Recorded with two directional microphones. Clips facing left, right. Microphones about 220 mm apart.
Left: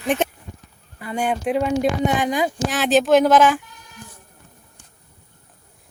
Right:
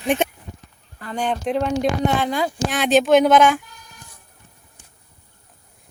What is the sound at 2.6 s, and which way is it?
Speech, centre (ahead or behind).